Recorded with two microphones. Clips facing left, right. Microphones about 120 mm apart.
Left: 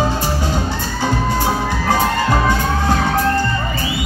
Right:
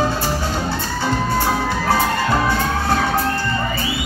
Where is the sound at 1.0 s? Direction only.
15° left (ahead or behind).